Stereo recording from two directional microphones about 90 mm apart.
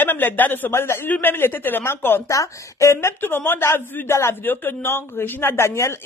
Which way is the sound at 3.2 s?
20° left (ahead or behind).